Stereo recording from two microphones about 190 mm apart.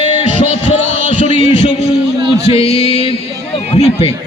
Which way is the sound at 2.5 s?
30° left (ahead or behind).